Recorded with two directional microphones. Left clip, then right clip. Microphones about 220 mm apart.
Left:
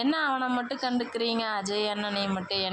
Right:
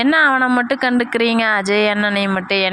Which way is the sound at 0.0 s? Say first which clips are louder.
Right 14 dB; 30° right (ahead or behind).